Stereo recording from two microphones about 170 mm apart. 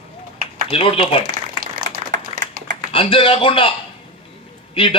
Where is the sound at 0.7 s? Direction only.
35° left (ahead or behind).